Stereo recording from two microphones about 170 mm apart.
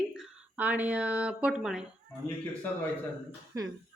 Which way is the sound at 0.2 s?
10° right (ahead or behind).